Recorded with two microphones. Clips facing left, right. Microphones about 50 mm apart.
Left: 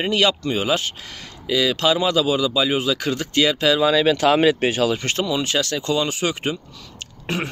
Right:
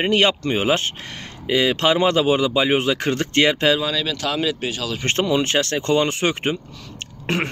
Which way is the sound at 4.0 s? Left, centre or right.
Left.